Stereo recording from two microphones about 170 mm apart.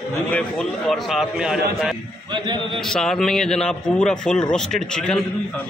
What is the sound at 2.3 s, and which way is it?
Speech, 25° right (ahead or behind).